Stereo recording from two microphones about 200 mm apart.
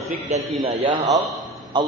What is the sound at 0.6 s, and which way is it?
A man's voice, 30° right (ahead or behind).